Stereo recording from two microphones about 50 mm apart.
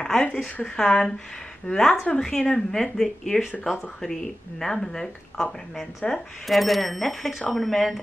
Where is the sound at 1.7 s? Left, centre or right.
Left.